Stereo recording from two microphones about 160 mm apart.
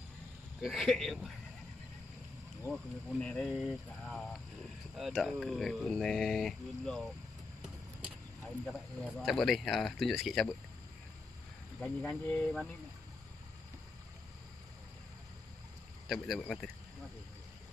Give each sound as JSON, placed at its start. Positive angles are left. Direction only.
{"t": 0.6, "sound": "speech", "side_deg": 0}
{"t": 2.7, "sound": "speech", "side_deg": 0}
{"t": 8.6, "sound": "speech", "side_deg": 0}
{"t": 11.8, "sound": "speech", "side_deg": 5}
{"t": 16.1, "sound": "speech", "side_deg": 0}